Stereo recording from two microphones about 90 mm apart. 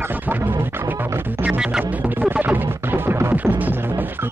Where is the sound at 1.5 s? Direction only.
10° right (ahead or behind).